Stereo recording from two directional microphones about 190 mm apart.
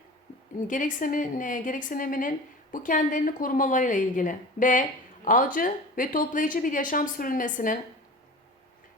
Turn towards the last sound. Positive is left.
turn(degrees=45)  # may be behind; listen again after turning